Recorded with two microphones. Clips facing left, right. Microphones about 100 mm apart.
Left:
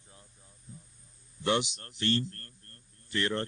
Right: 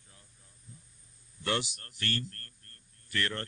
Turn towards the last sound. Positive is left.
turn(degrees=20)  # may be behind; listen again after turning